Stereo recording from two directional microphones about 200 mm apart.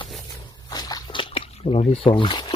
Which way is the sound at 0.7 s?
20° left (ahead or behind).